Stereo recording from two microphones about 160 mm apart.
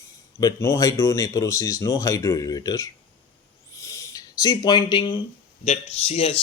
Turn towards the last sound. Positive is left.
turn(degrees=40)  # may be behind; listen again after turning